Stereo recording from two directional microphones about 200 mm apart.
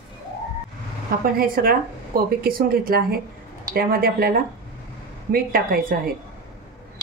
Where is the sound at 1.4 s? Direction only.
50° right (ahead or behind).